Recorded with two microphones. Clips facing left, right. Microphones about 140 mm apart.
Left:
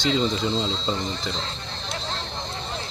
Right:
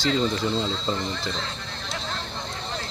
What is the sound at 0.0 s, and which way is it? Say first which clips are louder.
Speech: left 1 dB; 20° left (ahead or behind).